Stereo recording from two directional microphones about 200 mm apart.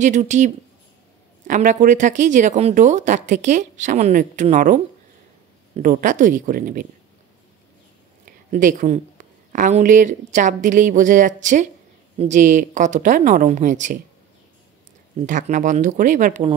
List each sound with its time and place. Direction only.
0.0 s speech: 35° right (ahead or behind)
1.5 s speech: 40° right (ahead or behind)
8.3 s speech: 40° right (ahead or behind)
15.1 s speech: 40° right (ahead or behind)